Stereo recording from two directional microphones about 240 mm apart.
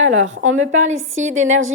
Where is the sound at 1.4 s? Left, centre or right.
Right.